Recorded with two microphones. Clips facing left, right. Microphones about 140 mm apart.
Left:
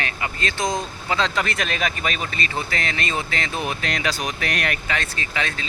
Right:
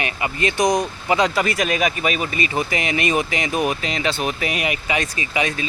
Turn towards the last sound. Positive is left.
turn(degrees=-15)  # may be behind; listen again after turning